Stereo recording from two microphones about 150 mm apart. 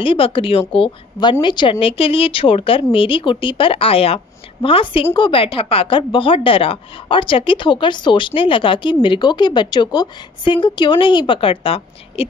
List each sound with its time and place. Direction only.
0.0 s speech: 35° left (ahead or behind)